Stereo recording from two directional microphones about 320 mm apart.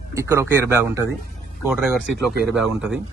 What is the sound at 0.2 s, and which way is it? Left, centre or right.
Speech, centre.